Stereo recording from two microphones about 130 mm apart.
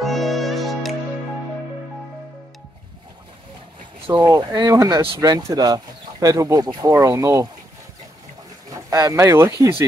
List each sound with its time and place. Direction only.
0.0 s music: centre (ahead or behind)
4.1 s speech: 30° right (ahead or behind)
8.6 s speech: 25° right (ahead or behind)